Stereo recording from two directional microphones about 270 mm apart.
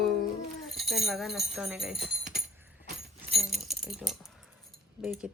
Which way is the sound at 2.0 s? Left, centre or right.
Right.